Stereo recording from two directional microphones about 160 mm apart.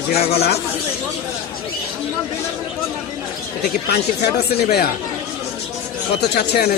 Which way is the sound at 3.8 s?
90° left.